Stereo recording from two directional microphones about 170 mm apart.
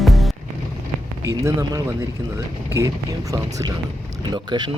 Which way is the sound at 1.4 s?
15° right (ahead or behind).